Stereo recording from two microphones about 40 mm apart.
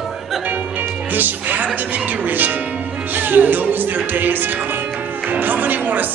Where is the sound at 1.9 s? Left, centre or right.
Right.